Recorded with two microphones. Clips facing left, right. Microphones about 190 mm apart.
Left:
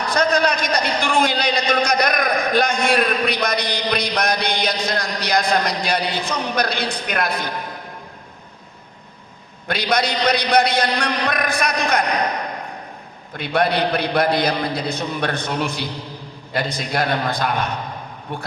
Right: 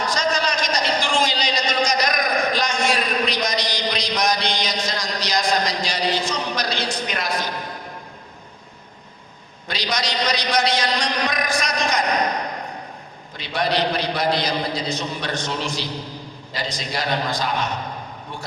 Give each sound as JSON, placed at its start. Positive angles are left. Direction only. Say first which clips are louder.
{"t": 0.1, "sound": "a sound", "louder": "left 9 dB", "side_deg": 60}
{"t": 9.6, "sound": "a man's voice", "louder": "left 5 dB", "side_deg": 55}
{"t": 13.3, "sound": "a man's voice", "louder": "left 3 dB", "side_deg": 55}